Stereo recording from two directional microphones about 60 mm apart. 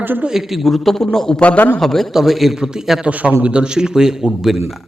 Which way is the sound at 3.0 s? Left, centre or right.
Right.